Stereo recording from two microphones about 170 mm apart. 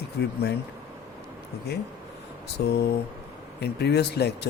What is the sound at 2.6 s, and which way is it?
Speech, 70° left (ahead or behind).